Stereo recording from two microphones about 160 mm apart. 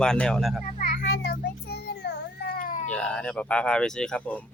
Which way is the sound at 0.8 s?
75° left (ahead or behind).